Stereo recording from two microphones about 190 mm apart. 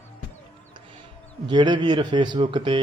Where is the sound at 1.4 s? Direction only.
25° right (ahead or behind).